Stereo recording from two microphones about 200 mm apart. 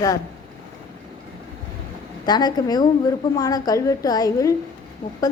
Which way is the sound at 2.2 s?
20° left (ahead or behind).